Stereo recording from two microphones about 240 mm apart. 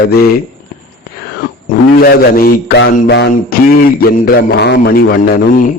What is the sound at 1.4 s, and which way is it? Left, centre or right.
Speech, left.